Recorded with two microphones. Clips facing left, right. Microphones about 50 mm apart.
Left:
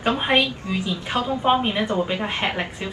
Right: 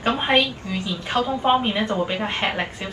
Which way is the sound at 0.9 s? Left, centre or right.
Left.